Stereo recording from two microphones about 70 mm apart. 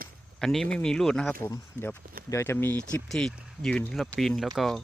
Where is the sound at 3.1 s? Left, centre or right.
Centre.